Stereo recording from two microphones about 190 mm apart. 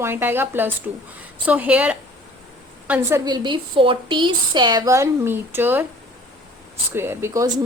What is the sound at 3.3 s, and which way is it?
A woman's voice, 25° right (ahead or behind).